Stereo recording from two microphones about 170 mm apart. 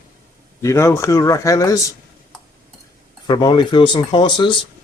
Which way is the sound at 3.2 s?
25° left (ahead or behind).